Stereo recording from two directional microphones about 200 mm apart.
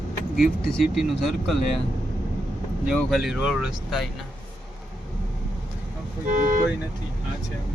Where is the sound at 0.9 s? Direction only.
Centre (ahead or behind).